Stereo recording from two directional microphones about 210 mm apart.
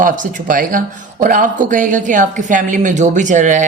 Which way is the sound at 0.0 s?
40° right (ahead or behind).